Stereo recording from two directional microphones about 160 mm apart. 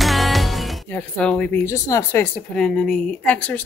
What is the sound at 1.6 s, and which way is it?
Speech, 20° left (ahead or behind).